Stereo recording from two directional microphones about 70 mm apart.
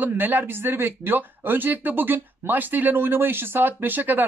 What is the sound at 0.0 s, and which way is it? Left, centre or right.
Speech, right.